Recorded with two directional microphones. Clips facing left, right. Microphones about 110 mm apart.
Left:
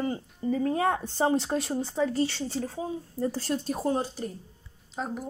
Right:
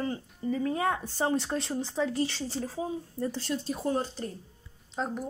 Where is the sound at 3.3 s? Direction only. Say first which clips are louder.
Left 2 dB; 45° left (ahead or behind).